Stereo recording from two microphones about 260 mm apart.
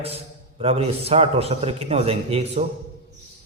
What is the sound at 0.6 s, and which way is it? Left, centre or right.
A man's voice, right.